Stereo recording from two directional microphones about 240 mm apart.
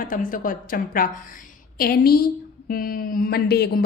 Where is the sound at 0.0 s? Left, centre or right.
Left.